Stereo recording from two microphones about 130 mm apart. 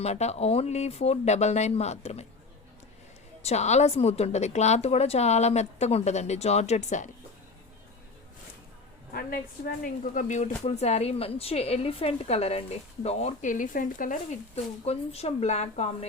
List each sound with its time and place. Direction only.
0.0 s a woman's voice: 55° left (ahead or behind)
3.4 s a woman's voice: 60° left (ahead or behind)
9.8 s speech: 85° left; by 13.3 s 55° left (ahead or behind)
13.4 s speech: 90° left
14.5 s a woman's voice: 55° left (ahead or behind)